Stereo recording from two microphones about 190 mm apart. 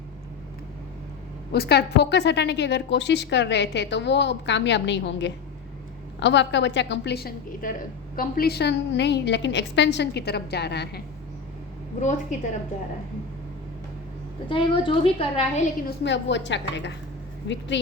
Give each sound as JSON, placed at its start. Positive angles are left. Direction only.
{"t": 1.5, "sound": "a woman's voice", "side_deg": 60}
{"t": 11.9, "sound": "a woman's voice", "side_deg": 40}
{"t": 14.5, "sound": "a woman's voice", "side_deg": 25}
{"t": 16.0, "sound": "a woman's voice", "side_deg": 70}